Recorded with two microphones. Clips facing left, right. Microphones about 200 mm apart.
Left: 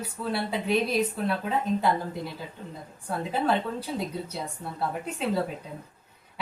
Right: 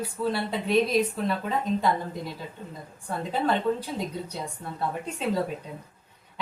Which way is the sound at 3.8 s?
5° left (ahead or behind).